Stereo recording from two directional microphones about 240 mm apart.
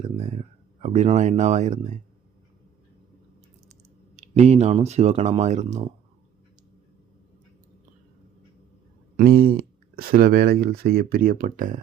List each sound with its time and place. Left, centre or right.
0.2 s a sound: right
4.2 s speech: right
9.1 s speech: right